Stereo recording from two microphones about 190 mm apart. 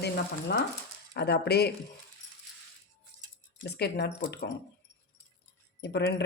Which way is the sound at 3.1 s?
55° left (ahead or behind).